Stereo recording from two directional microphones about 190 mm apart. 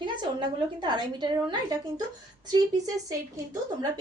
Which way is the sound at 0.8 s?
25° right (ahead or behind).